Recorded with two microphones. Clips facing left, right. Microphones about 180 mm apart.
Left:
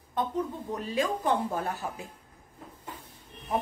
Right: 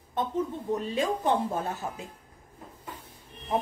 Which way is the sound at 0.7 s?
25° right (ahead or behind).